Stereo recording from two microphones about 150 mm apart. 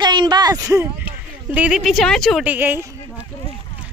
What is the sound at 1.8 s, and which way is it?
Speech, centre (ahead or behind).